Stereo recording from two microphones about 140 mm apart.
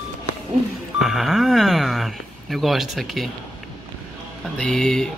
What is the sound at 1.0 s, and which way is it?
Speech, centre (ahead or behind).